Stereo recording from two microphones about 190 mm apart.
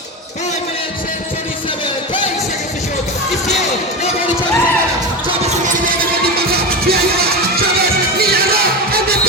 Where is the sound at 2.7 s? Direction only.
35° left (ahead or behind).